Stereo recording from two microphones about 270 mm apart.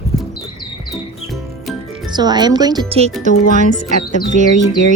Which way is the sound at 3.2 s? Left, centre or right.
Right.